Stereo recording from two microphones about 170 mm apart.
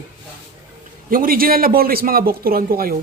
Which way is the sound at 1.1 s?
55° right (ahead or behind).